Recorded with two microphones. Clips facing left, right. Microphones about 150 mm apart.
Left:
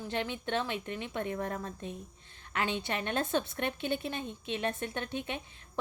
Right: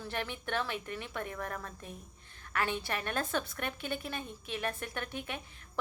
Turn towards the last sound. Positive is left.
turn(degrees=25)  # may be behind; listen again after turning